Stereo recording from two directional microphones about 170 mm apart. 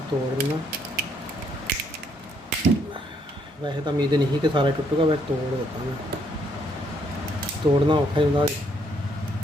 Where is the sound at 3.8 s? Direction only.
25° right (ahead or behind).